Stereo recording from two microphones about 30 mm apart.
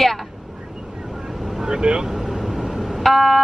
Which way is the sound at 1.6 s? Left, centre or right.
Right.